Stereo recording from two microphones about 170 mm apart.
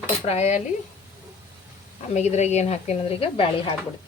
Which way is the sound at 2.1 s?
40° left (ahead or behind).